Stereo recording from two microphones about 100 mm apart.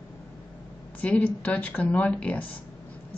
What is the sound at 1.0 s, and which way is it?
Speech, 15° left (ahead or behind).